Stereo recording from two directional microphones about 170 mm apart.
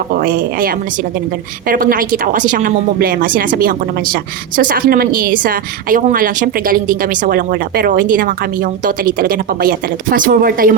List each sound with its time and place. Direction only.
0.1 s speech: 55° right (ahead or behind)